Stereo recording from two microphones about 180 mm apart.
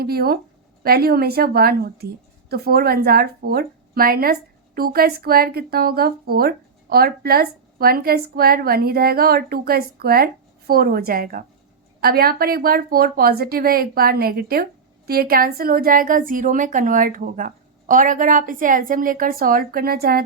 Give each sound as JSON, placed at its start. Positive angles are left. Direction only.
{"t": 0.0, "sound": "a woman's voice", "side_deg": -60}